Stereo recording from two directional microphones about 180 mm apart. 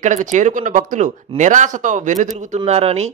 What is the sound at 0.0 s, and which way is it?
A man's voice, 45° right (ahead or behind).